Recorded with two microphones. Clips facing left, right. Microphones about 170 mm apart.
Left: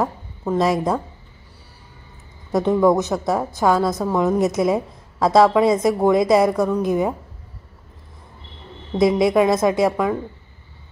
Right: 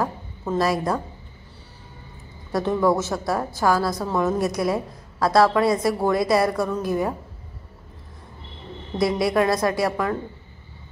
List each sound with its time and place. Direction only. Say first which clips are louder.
0.5 s a woman's voice: left 3 dB; 20° left (ahead or behind)
2.5 s a woman's voice: left 4 dB; 20° left (ahead or behind)
8.9 s a woman's voice: left 5 dB; 20° left (ahead or behind)